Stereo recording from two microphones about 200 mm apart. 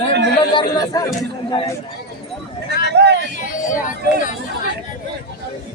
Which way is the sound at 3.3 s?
40° left (ahead or behind).